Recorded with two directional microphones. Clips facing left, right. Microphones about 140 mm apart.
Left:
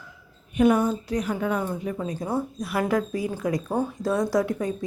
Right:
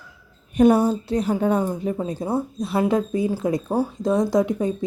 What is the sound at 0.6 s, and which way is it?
A woman's voice, 35° right (ahead or behind).